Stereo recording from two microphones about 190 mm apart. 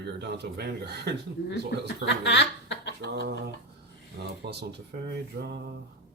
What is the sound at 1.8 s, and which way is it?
Speech, 65° left (ahead or behind).